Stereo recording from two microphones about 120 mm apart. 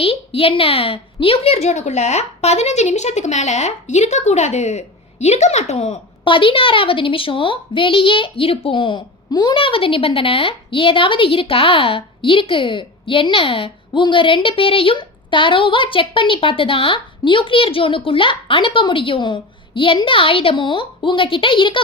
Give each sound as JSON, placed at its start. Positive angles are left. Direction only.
{"t": 0.0, "sound": "a woman's voice", "side_deg": 50}
{"t": 6.2, "sound": "a woman's voice", "side_deg": 45}